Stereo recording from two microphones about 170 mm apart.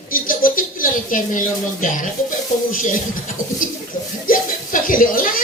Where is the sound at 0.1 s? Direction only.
55° left (ahead or behind).